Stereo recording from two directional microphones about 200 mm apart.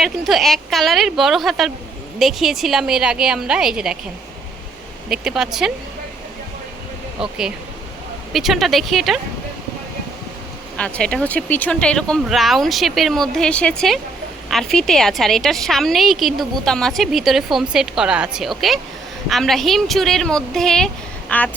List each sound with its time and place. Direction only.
0.0 s a woman's voice: centre (ahead or behind)
5.0 s a woman's voice: centre (ahead or behind)
7.2 s a woman's voice: 5° right (ahead or behind)
10.8 s a woman's voice: 5° left (ahead or behind)